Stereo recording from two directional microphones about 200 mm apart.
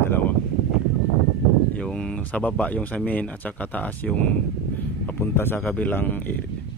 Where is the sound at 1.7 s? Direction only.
5° left (ahead or behind).